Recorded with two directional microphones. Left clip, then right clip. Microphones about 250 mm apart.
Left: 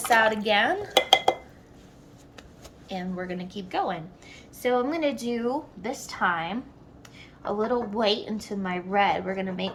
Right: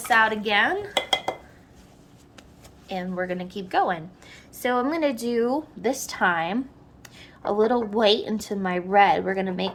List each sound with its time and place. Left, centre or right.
0.1 s speech: centre
2.9 s a woman's voice: centre; by 9.7 s right